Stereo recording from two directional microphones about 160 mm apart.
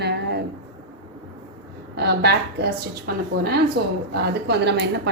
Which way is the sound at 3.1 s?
70° right (ahead or behind).